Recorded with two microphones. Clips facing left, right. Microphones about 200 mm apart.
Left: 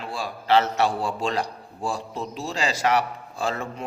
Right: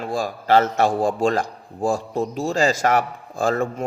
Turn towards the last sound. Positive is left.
turn(degrees=-45)  # may be behind; listen again after turning